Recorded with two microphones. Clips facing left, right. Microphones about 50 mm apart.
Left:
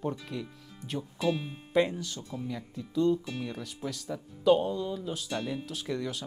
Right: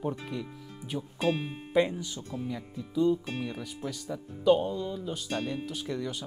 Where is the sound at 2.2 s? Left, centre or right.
Right.